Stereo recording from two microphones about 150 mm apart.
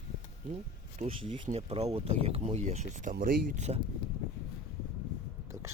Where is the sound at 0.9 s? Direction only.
40° right (ahead or behind); by 3.6 s 70° right (ahead or behind).